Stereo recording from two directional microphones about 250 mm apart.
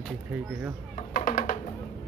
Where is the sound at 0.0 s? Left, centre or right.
Centre.